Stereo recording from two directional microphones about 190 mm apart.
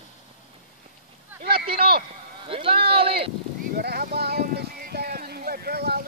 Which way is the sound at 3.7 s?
55° right (ahead or behind).